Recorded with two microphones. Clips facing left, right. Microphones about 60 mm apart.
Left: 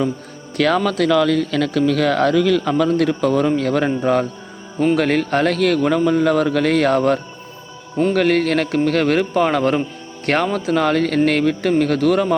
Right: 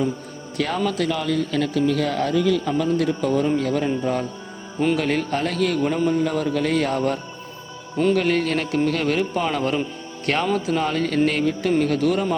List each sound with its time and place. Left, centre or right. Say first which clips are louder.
0.5 s a man's voice: left 6 dB; left